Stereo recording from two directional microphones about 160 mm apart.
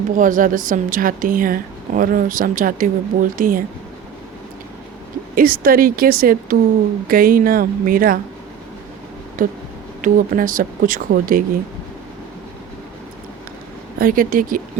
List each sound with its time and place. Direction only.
0.2 s a woman's voice: 55° right (ahead or behind)
5.3 s a woman's voice: 65° right (ahead or behind)
9.4 s a woman's voice: 60° right (ahead or behind)
14.0 s a woman's voice: 60° right (ahead or behind)